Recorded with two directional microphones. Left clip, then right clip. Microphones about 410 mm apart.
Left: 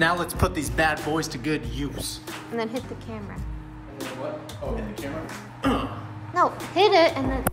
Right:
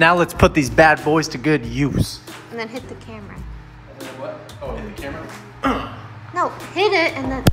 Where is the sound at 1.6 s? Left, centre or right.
Centre.